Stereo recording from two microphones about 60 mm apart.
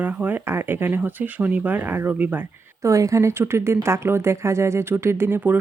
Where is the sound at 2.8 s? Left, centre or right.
Right.